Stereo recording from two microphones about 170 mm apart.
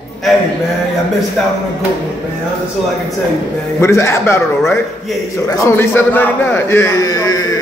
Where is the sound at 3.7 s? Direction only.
15° left (ahead or behind).